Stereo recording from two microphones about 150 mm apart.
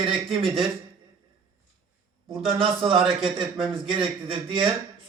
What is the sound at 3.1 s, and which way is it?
A man's voice, centre (ahead or behind).